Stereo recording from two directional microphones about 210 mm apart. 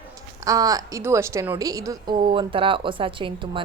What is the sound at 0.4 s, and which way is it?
A woman's voice, 15° right (ahead or behind).